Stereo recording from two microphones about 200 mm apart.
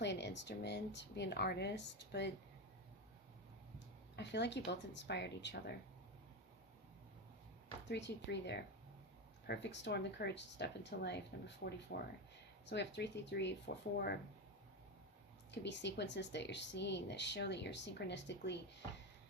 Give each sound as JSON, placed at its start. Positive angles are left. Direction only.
{"t": 0.0, "sound": "speech", "side_deg": 60}
{"t": 4.1, "sound": "speech", "side_deg": 60}
{"t": 7.9, "sound": "speech", "side_deg": 60}
{"t": 15.6, "sound": "speech", "side_deg": 60}